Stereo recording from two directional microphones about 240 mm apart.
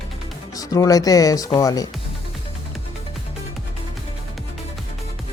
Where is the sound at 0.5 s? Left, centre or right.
Centre.